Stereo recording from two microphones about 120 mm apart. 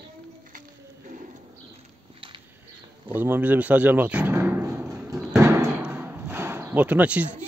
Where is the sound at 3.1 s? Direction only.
15° right (ahead or behind).